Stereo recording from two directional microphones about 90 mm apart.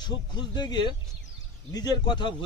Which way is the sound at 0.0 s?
55° left (ahead or behind).